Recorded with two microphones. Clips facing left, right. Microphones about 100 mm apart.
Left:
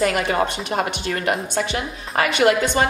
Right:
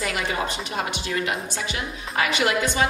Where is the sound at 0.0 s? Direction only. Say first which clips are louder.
Left 7 dB; 50° left (ahead or behind).